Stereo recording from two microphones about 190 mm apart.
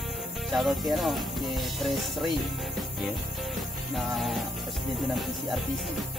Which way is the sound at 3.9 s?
Centre (ahead or behind).